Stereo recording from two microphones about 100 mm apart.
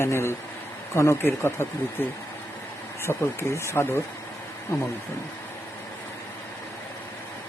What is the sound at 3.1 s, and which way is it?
Speech, 25° left (ahead or behind).